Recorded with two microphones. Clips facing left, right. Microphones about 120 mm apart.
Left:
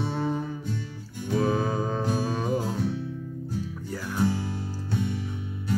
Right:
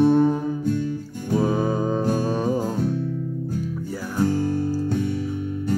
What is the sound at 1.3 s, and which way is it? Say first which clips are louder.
Music: right 4 dB; 15° right (ahead or behind).